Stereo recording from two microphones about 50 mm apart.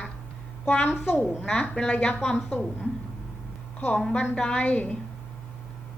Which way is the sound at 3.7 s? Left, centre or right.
Left.